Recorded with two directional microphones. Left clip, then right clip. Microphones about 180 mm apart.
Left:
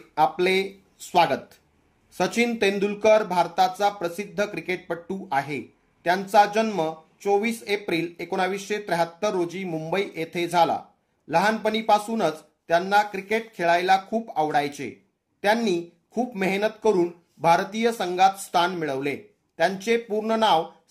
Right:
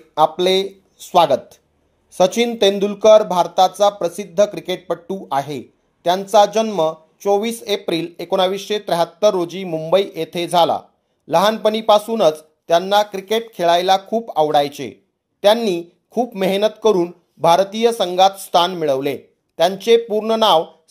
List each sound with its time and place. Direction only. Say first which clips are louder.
0.1 s speech: right 6 dB; 35° right (ahead or behind)